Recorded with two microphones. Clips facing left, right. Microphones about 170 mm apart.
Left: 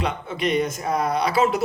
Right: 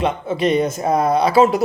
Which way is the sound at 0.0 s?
25° right (ahead or behind).